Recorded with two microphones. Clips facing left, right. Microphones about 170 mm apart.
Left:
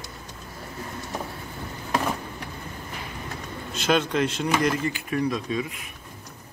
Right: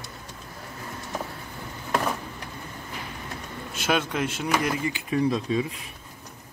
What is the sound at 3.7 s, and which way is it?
Speech, 10° right (ahead or behind).